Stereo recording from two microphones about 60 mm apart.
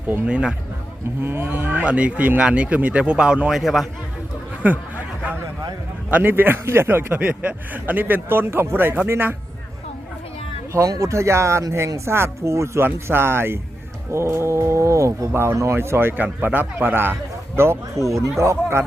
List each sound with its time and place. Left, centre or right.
1.2 s a man's voice: right
1.8 s speech: right
3.6 s a man's voice: centre
4.6 s a sound: right
6.1 s a man's voice: right
7.2 s a man's voice: right
10.8 s speech: right
15.3 s a man's voice: right
17.6 s speech: right
18.1 s speech: right